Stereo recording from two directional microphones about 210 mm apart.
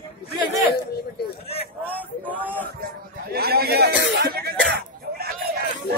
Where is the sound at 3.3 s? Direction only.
45° right (ahead or behind).